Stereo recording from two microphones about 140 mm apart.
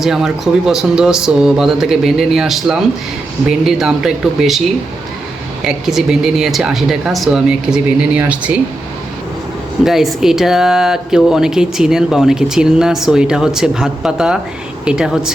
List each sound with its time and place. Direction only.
0.0 s speech: 5° right (ahead or behind)
5.6 s speech: 5° right (ahead or behind)
9.8 s speech: centre (ahead or behind)